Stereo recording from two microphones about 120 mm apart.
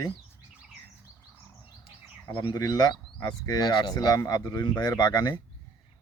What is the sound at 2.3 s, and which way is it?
Speech, 45° left (ahead or behind).